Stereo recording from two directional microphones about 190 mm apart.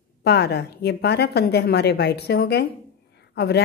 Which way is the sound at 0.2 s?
60° left (ahead or behind).